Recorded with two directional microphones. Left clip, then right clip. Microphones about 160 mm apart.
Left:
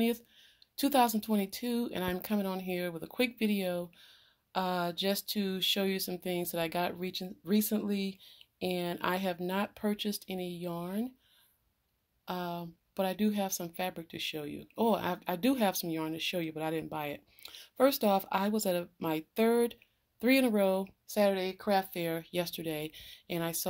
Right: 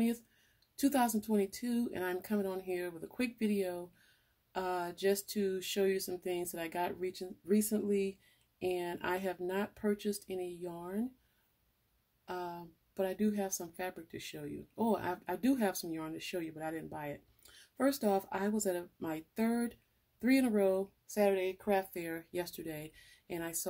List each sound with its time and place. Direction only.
0.7 s speech: 25° left (ahead or behind)
12.3 s speech: 30° left (ahead or behind)
17.7 s speech: 25° left (ahead or behind)